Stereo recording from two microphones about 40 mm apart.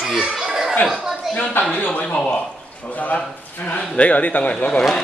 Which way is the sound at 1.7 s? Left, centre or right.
Left.